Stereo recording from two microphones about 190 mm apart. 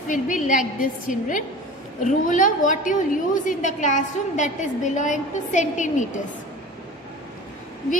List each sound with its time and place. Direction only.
0.1 s a woman's voice: 45° left (ahead or behind)